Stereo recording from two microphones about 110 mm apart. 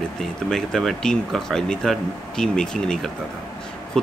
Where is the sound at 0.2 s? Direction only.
5° left (ahead or behind).